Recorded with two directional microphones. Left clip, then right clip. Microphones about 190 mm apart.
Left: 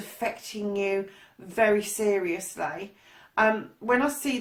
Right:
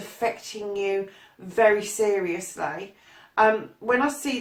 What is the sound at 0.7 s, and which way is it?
Speech, 40° left (ahead or behind).